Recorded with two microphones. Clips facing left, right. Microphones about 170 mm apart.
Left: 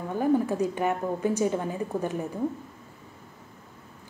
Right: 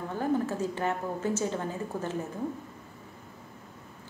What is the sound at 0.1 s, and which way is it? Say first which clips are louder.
A woman's voice: left 5 dB; 15° left (ahead or behind).